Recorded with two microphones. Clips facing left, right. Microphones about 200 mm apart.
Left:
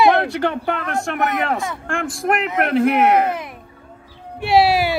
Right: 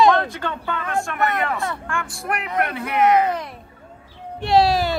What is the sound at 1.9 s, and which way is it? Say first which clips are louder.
Speech: left 6 dB; 90° left.